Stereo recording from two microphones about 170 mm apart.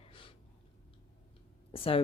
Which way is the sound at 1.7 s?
35° left (ahead or behind).